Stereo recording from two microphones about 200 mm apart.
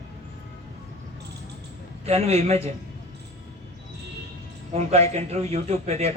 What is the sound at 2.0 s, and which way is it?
Speech, 30° right (ahead or behind).